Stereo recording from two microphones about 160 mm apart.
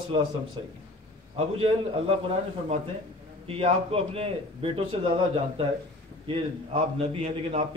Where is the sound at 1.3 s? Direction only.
40° right (ahead or behind).